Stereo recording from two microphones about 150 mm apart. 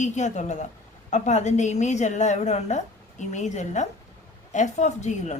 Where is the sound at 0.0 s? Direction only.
50° left (ahead or behind).